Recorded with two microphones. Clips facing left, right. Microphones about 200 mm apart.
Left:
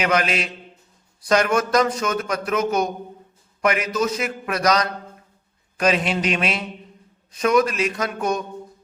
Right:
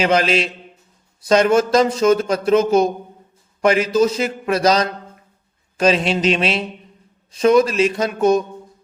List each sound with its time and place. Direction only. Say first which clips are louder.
0.0 s a man's voice: right 5 dB; 30° right (ahead or behind)